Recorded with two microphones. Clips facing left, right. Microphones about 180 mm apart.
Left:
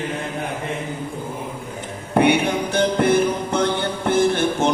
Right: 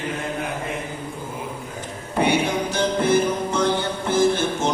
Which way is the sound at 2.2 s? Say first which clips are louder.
Left 2 dB; 60° left (ahead or behind).